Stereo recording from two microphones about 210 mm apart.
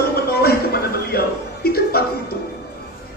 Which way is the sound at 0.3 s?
45° left (ahead or behind).